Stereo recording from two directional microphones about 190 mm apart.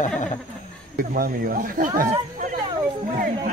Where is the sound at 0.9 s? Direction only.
50° right (ahead or behind).